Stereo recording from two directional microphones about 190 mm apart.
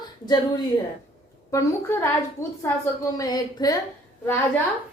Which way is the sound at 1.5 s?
15° left (ahead or behind).